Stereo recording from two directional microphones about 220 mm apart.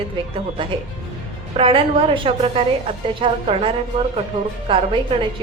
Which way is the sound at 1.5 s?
25° right (ahead or behind).